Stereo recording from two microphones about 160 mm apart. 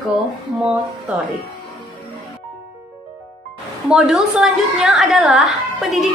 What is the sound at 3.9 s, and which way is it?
Speech, 5° right (ahead or behind).